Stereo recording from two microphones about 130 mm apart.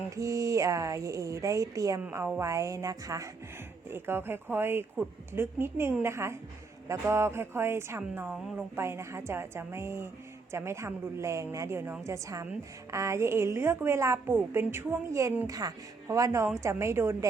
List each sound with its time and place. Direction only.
0.2 s a woman's voice: 25° right (ahead or behind)